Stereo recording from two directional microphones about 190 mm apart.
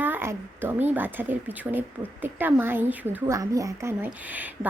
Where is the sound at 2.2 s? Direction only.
10° right (ahead or behind).